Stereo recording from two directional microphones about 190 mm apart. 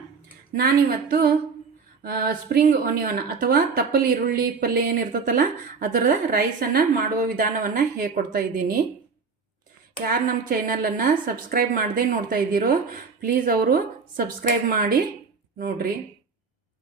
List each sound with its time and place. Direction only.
2.0 s a woman's voice: 50° right (ahead or behind)
10.0 s a woman's voice: 50° right (ahead or behind)